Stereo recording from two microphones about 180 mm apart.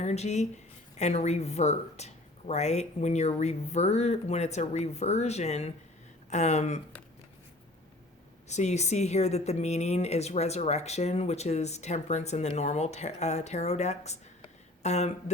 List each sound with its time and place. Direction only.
0.0 s speech: 40° left (ahead or behind)
8.4 s speech: 40° left (ahead or behind)